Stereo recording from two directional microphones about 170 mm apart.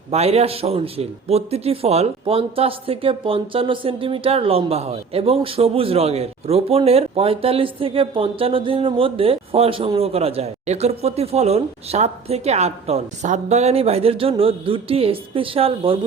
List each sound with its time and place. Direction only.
0.1 s a man's voice: 35° right (ahead or behind)